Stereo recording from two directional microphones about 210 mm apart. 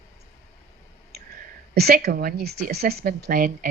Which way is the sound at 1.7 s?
50° right (ahead or behind).